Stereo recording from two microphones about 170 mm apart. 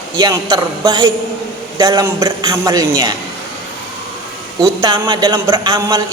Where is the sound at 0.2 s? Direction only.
25° right (ahead or behind).